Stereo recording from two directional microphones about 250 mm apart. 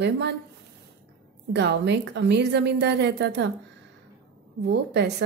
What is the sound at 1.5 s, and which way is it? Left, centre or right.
A woman's voice, right.